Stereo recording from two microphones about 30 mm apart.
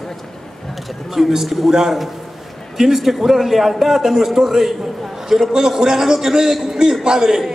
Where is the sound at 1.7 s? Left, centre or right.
Centre.